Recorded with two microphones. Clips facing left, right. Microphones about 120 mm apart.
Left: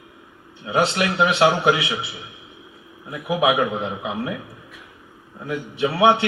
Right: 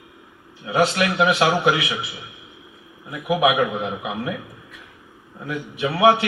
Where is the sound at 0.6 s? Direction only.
25° left (ahead or behind).